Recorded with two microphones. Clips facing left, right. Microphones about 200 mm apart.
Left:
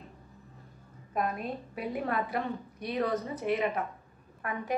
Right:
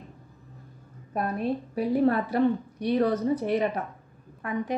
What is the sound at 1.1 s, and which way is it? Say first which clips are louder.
A woman's voice: right 5 dB; 30° right (ahead or behind).